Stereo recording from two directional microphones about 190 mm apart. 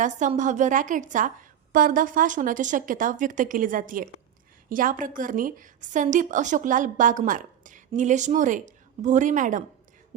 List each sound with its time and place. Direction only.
0.0 s a woman's voice: 40° right (ahead or behind)